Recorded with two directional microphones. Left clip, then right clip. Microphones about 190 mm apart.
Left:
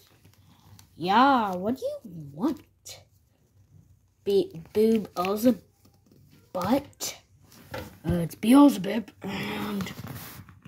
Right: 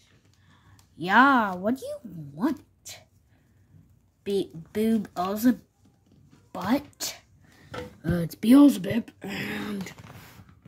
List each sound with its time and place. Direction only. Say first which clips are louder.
0.9 s speech: right 1 dB; 20° right (ahead or behind)
4.2 s speech: left 4 dB; 20° right (ahead or behind)
8.3 s speech: right 1 dB; 10° right (ahead or behind)